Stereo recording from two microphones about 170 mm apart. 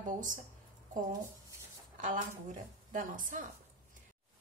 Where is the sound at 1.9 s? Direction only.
50° right (ahead or behind).